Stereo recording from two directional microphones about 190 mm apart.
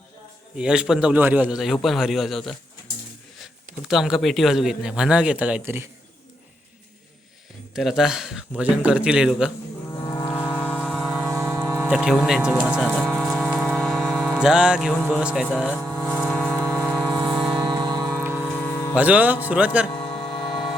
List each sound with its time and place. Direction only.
0.5 s speech: 5° right (ahead or behind)
7.8 s speech: centre (ahead or behind)
10.1 s vehicle: 15° left (ahead or behind); by 11.2 s 5° right (ahead or behind)
11.3 s music: 15° right (ahead or behind)
15.5 s speech: 5° right (ahead or behind)
16.3 s a sound: centre (ahead or behind)
17.2 s music: 5° right (ahead or behind)
17.6 s music: 25° right (ahead or behind)
18.2 s music: 10° right (ahead or behind)
18.5 s music: 10° left (ahead or behind)
18.9 s speech: 10° right (ahead or behind)
19.9 s music: 25° left (ahead or behind)